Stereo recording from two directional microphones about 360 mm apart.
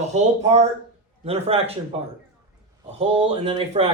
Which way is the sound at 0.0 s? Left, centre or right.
Centre.